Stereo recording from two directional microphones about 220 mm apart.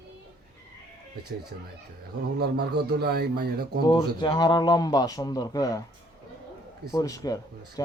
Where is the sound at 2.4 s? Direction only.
45° right (ahead or behind).